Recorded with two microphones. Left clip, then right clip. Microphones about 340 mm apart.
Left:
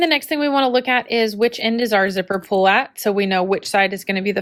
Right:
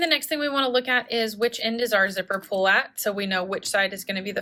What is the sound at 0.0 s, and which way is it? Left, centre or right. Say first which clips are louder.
Speech: left 5 dB; centre.